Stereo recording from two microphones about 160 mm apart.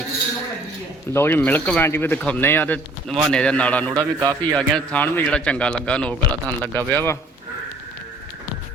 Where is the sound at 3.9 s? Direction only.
25° right (ahead or behind).